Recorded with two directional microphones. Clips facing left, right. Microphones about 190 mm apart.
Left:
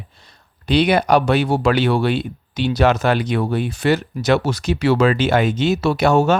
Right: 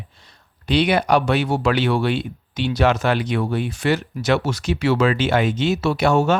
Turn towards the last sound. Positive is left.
turn(degrees=40)  # may be behind; listen again after turning